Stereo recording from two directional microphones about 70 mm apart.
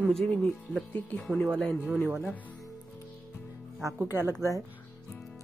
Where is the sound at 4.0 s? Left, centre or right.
Right.